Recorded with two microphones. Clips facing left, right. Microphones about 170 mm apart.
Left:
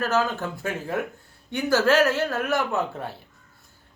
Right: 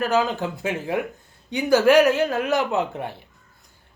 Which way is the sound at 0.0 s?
15° right (ahead or behind).